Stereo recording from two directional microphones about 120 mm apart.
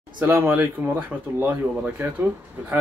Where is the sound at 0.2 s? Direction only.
15° right (ahead or behind).